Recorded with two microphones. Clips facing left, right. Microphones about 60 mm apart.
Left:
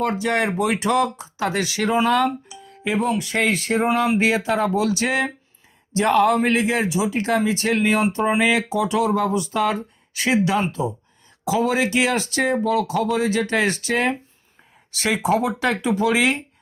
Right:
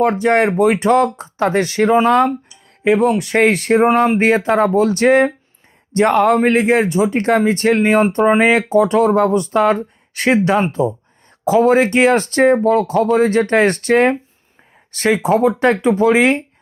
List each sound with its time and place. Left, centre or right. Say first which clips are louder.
0.0 s speech: right 7 dB; right
2.8 s speech: right 8 dB; right